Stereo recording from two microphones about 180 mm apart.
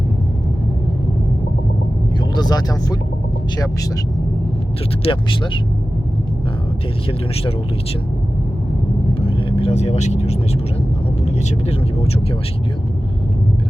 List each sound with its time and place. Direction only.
2.3 s speech: 25° left (ahead or behind)
5.0 s speech: 30° left (ahead or behind)
9.5 s speech: 35° left (ahead or behind)